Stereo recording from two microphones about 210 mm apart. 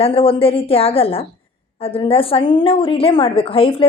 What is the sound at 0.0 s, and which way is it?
A woman's voice, 25° left (ahead or behind).